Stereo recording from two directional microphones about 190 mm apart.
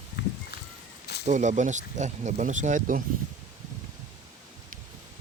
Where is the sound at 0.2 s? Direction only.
65° left (ahead or behind).